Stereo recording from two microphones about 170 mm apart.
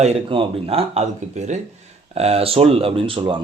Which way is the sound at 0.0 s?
30° right (ahead or behind).